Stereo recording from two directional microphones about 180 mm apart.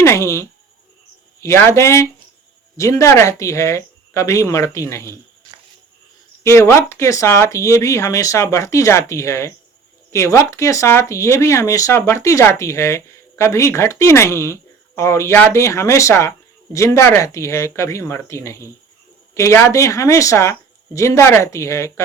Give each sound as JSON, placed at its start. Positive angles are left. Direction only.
{"t": 0.0, "sound": "speech", "side_deg": 15}
{"t": 6.4, "sound": "speech", "side_deg": 15}